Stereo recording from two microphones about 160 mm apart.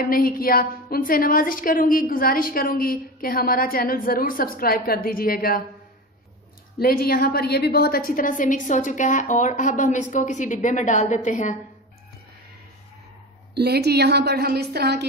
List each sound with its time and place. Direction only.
0.0 s a woman's voice: 65° left (ahead or behind)
6.8 s a woman's voice: 70° left (ahead or behind); by 11.5 s 50° left (ahead or behind)
13.6 s a woman's voice: 90° right